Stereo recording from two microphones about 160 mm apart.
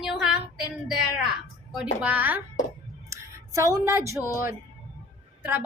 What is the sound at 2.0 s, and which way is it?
Speech, 10° right (ahead or behind).